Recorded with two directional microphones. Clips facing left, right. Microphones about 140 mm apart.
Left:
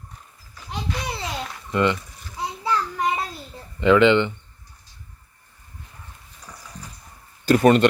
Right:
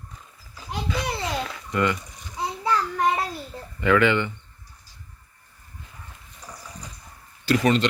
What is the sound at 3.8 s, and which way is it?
Speech, 20° left (ahead or behind).